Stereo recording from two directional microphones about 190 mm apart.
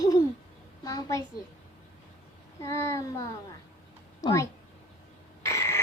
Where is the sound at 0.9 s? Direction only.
20° left (ahead or behind).